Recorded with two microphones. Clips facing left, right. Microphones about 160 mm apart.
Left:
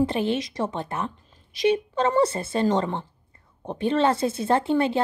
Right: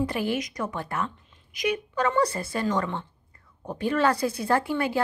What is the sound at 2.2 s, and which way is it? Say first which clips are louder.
A woman's voice: left 4 dB; 25° left (ahead or behind).